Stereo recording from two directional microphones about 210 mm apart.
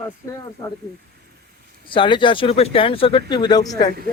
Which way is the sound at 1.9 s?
25° left (ahead or behind).